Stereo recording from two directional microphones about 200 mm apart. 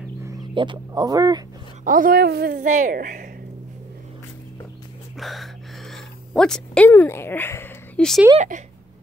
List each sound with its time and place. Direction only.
0.2 s speech: 20° right (ahead or behind)
1.9 s a woman's voice: 45° right (ahead or behind)
5.1 s a sound: centre (ahead or behind)
8.4 s a woman's voice: 40° right (ahead or behind)